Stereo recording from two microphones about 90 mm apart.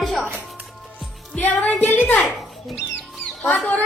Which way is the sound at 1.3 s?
20° left (ahead or behind).